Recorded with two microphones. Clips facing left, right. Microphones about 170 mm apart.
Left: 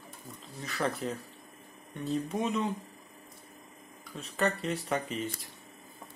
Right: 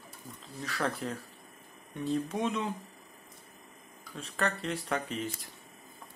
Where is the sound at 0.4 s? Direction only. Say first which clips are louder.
Left 1 dB; centre (ahead or behind).